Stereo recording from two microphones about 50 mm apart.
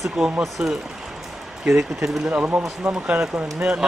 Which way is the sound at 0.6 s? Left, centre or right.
Right.